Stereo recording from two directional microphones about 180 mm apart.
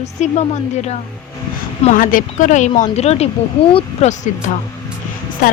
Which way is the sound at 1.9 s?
50° left (ahead or behind).